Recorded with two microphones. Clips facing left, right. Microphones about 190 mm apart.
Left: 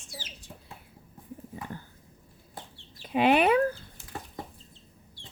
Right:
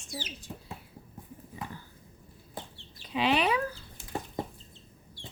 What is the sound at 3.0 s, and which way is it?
Speech, 50° left (ahead or behind).